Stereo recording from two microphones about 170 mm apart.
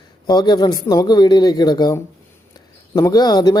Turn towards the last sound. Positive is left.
turn(degrees=25)  # may be behind; listen again after turning